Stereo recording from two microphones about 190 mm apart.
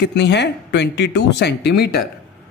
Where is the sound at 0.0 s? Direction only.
65° left (ahead or behind).